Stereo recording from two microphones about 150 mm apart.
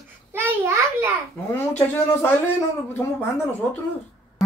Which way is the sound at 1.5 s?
15° left (ahead or behind).